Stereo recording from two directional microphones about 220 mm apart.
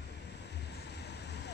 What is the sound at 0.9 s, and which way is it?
Vehicle, 50° left (ahead or behind).